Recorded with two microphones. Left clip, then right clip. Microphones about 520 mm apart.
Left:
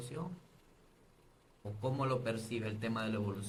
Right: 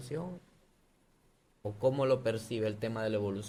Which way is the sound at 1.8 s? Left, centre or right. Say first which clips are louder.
Right 7 dB; right.